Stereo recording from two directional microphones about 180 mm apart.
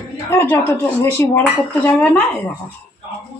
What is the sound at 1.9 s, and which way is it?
Speech, 10° left (ahead or behind).